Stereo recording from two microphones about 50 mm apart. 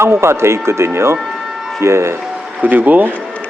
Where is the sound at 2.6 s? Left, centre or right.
Right.